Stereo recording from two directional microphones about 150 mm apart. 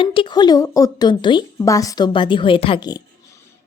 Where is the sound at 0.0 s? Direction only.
35° left (ahead or behind).